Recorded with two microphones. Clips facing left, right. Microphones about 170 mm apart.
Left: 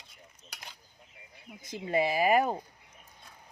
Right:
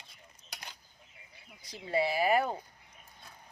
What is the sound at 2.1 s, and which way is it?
Speech, 15° left (ahead or behind).